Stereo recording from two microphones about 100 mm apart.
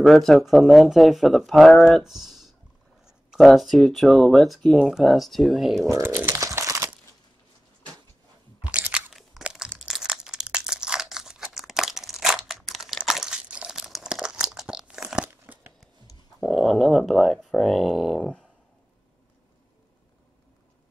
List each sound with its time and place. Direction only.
0.0 s speech: centre (ahead or behind)
5.8 s speech: 35° right (ahead or behind)
6.3 s a sound: 30° right (ahead or behind)
8.7 s crunch: 15° right (ahead or behind)
9.1 s crunch: 5° right (ahead or behind)
9.8 s crumpling: 5° right (ahead or behind)
15.2 s crumpling: 20° right (ahead or behind)
16.3 s a sound: centre (ahead or behind)